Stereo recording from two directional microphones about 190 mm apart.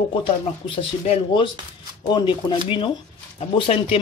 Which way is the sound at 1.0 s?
25° left (ahead or behind).